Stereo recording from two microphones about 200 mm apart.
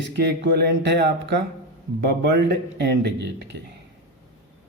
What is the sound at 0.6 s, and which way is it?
A man's voice, 55° right (ahead or behind).